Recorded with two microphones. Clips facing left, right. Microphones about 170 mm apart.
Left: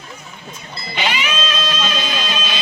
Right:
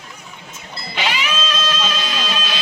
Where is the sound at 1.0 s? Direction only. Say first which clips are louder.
Left 1 dB; centre (ahead or behind).